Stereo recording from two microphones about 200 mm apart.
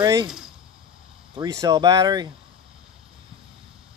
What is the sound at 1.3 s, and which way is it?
Speech, 20° right (ahead or behind).